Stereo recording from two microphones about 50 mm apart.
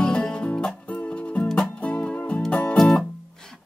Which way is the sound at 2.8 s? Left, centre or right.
Centre.